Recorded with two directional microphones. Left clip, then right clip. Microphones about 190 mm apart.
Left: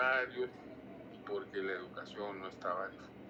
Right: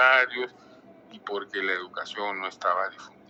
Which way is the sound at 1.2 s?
45° right (ahead or behind).